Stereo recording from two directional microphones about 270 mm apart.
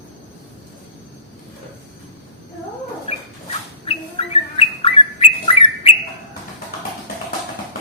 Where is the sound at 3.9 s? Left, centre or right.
Left.